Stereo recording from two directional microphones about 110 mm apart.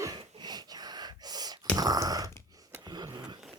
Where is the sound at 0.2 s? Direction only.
40° right (ahead or behind).